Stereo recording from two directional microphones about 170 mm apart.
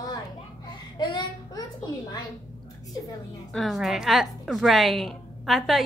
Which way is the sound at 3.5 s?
Centre (ahead or behind).